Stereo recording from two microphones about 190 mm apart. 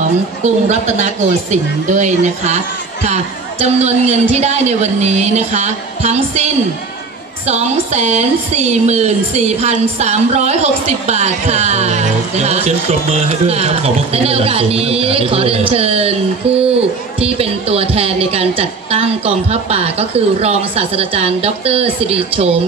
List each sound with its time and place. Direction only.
0.7 s a woman's voice: 40° right (ahead or behind)